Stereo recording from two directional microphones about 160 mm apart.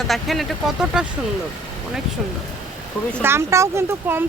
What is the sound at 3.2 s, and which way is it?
Speech, 15° right (ahead or behind).